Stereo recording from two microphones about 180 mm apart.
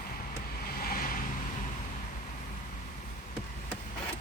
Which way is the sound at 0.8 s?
55° left (ahead or behind).